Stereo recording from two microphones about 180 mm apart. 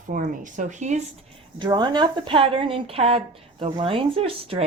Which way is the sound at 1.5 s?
25° right (ahead or behind).